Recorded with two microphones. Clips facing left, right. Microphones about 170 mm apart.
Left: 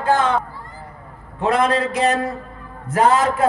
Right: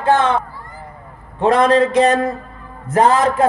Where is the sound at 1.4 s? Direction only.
35° right (ahead or behind).